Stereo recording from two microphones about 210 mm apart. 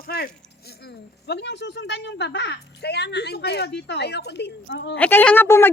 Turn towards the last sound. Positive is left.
turn(degrees=10)  # may be behind; listen again after turning